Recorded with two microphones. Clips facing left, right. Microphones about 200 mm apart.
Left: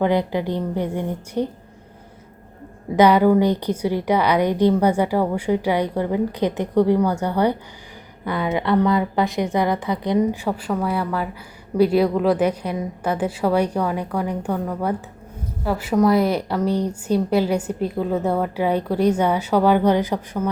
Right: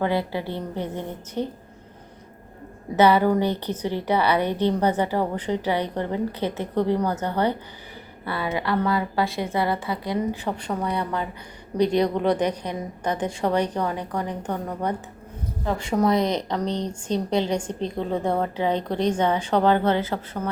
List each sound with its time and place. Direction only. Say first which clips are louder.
0.0 s a woman's voice: left 5 dB; 20° left (ahead or behind)
2.9 s a woman's voice: left 4 dB; 15° left (ahead or behind)
10.6 s a woman's voice: left 4 dB; 5° left (ahead or behind)